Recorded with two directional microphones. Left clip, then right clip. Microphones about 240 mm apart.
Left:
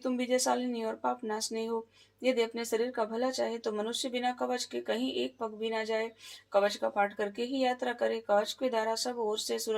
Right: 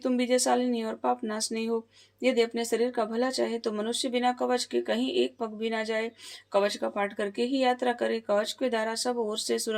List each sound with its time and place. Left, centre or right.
0.0 s speech: right